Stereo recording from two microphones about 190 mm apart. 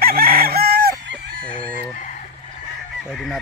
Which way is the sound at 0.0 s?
50° right (ahead or behind).